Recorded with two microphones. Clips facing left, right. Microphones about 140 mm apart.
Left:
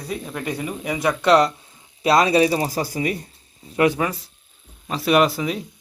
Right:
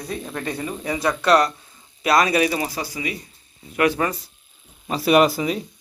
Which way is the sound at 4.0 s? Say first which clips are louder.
Even; 5° left (ahead or behind).